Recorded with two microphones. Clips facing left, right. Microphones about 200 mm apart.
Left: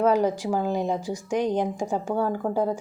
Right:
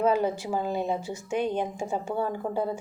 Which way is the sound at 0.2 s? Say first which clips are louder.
Left 4 dB; 10° left (ahead or behind).